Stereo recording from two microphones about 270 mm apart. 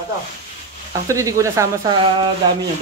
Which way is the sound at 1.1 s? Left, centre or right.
Centre.